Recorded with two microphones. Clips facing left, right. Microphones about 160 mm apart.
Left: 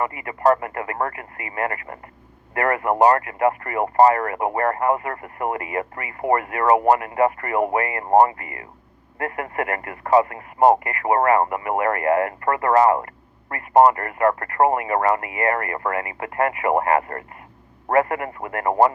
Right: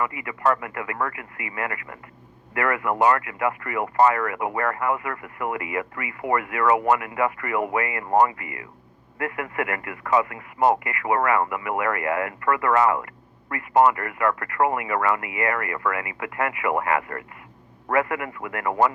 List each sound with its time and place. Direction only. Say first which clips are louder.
0.0 s speech: left 4 dB; 40° left (ahead or behind)